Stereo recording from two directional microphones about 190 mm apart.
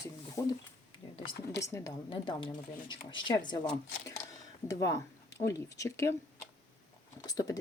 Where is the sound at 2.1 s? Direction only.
25° left (ahead or behind).